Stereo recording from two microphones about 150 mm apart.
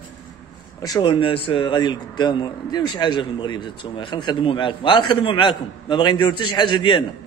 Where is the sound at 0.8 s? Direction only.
25° left (ahead or behind).